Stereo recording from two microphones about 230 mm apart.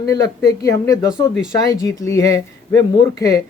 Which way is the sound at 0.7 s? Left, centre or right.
Centre.